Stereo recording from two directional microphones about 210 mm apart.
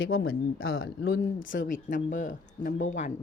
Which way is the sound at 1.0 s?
50° left (ahead or behind).